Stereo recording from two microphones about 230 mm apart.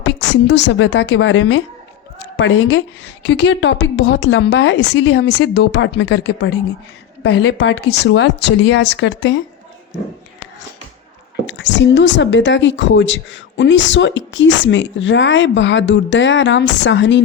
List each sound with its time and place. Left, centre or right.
0.0 s a woman's voice: left
11.4 s a woman's voice: left